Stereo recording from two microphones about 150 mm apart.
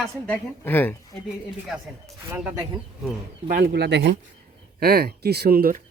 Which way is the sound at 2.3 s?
10° right (ahead or behind).